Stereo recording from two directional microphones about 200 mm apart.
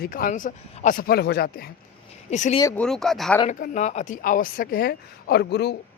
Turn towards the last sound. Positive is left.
turn(degrees=55)  # may be behind; listen again after turning